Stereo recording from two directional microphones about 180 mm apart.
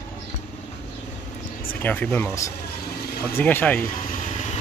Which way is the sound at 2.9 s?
60° left (ahead or behind).